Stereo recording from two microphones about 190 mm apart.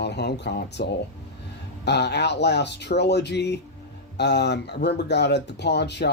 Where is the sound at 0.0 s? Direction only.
60° left (ahead or behind).